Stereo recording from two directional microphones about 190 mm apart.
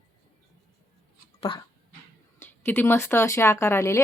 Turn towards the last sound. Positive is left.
turn(degrees=15)  # may be behind; listen again after turning